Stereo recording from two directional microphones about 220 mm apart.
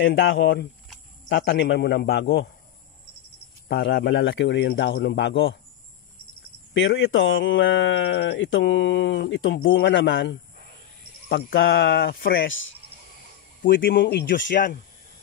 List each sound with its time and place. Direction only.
0.0 s speech: 60° left (ahead or behind)
3.6 s speech: 50° left (ahead or behind)
6.7 s speech: 60° left (ahead or behind)
13.7 s speech: 40° left (ahead or behind)
14.5 s speech: 40° left (ahead or behind)